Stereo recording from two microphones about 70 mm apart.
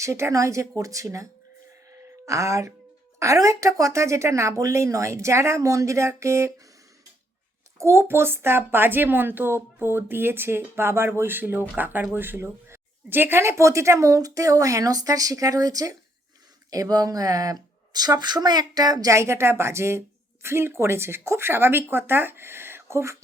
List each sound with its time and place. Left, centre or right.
0.0 s speech: right
7.8 s a child's voice: right
19.1 s a child's voice: right